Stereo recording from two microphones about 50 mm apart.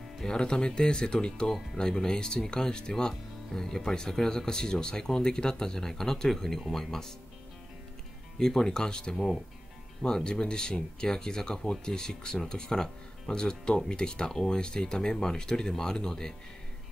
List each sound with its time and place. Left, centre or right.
0.2 s speech: centre
8.4 s speech: centre
9.1 s speech: centre